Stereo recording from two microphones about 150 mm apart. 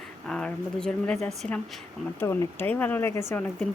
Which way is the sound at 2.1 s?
15° left (ahead or behind).